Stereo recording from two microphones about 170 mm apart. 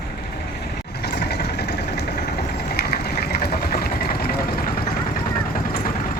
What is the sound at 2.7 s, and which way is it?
Sewing machine, 70° left (ahead or behind).